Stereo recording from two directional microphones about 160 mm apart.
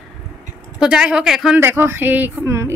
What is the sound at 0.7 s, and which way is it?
Speech, 5° right (ahead or behind).